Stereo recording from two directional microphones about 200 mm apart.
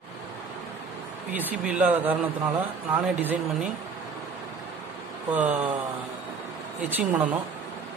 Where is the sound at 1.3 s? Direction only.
10° right (ahead or behind).